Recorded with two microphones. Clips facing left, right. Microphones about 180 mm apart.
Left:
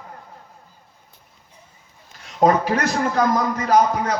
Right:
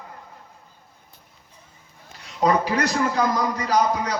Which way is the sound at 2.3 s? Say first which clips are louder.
Left 3 dB; 45° left (ahead or behind).